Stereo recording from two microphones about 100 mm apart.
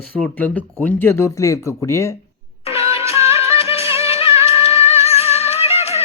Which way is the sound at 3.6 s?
75° left (ahead or behind).